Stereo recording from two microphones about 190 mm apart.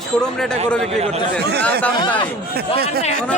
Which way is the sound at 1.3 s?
60° right (ahead or behind).